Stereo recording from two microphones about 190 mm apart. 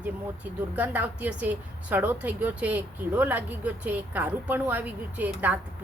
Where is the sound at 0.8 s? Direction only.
10° right (ahead or behind).